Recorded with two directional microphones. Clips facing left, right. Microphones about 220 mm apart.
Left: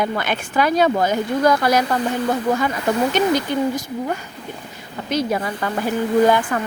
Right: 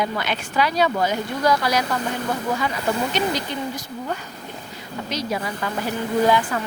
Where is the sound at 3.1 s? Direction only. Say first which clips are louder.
Left 6 dB; 50° left (ahead or behind).